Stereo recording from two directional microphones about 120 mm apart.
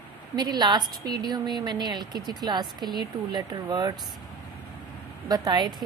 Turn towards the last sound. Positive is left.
turn(degrees=-35)  # may be behind; listen again after turning